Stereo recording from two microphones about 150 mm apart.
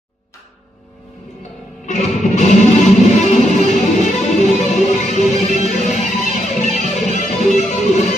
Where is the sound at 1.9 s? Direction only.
50° left (ahead or behind).